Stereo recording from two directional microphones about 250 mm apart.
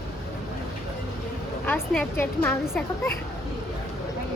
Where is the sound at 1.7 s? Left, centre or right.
Centre.